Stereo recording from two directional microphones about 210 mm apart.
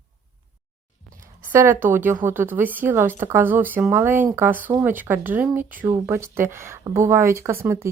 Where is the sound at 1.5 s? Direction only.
10° right (ahead or behind).